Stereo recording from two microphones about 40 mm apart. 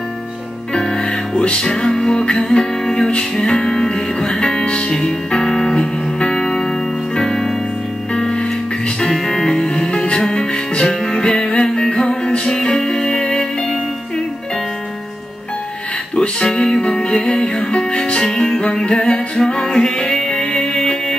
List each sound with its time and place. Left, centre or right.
0.7 s music: centre
6.1 s music: left
16.2 s music: left
18.2 s music: centre